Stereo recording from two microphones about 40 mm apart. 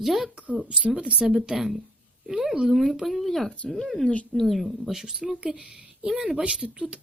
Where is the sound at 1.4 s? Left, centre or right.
Centre.